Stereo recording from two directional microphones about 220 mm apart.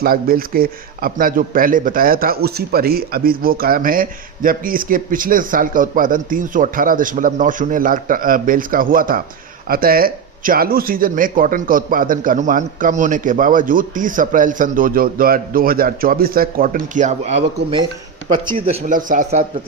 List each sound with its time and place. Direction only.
0.0 s a man's voice: 40° right (ahead or behind)
18.7 s a man's voice: 35° right (ahead or behind)